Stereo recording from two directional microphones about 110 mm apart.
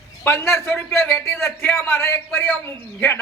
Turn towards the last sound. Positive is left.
turn(degrees=20)  # may be behind; listen again after turning